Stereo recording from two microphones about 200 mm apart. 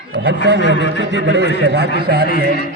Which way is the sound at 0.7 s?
60° right (ahead or behind).